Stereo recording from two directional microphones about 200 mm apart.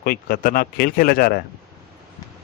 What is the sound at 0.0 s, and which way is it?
Speech, 45° left (ahead or behind).